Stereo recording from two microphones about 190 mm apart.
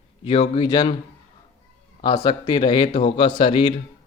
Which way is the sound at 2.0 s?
25° left (ahead or behind).